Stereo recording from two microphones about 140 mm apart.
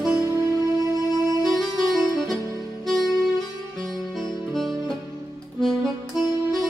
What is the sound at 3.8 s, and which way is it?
Music, centre (ahead or behind).